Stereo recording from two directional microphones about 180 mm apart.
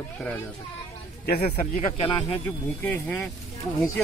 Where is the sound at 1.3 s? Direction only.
35° left (ahead or behind).